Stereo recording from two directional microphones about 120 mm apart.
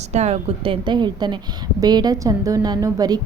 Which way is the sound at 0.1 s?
65° right (ahead or behind).